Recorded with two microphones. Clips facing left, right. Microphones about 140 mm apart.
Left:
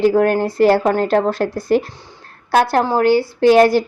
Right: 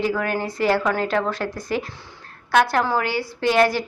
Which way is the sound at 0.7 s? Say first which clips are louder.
Left 6 dB; 35° left (ahead or behind).